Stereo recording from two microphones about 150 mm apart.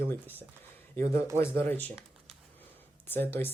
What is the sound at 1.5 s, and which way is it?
Speech, 10° left (ahead or behind).